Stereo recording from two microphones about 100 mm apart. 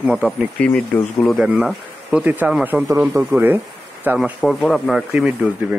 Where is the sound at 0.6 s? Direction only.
10° left (ahead or behind).